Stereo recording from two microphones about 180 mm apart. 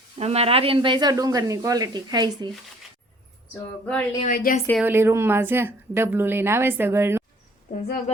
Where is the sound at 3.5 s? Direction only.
10° left (ahead or behind).